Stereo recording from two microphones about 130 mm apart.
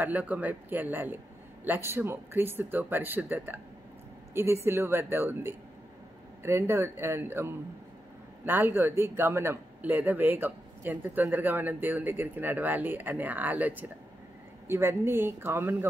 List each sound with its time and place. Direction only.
0.0 s speech: 10° right (ahead or behind)